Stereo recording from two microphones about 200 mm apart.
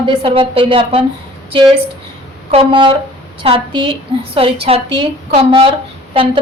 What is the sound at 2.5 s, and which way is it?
A woman's voice, 25° right (ahead or behind).